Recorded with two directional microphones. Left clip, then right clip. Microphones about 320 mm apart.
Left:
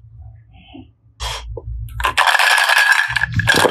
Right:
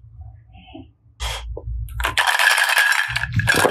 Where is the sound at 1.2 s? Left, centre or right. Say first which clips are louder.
Left 3 dB; centre.